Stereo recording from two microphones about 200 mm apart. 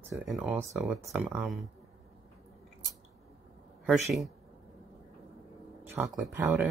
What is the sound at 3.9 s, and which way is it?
Speech, centre (ahead or behind).